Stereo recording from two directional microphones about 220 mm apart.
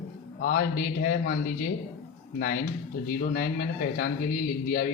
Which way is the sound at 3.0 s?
40° left (ahead or behind).